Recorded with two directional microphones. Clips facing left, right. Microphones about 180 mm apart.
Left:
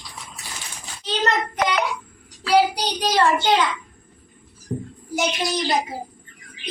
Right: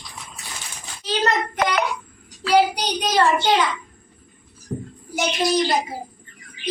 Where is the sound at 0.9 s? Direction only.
Centre (ahead or behind).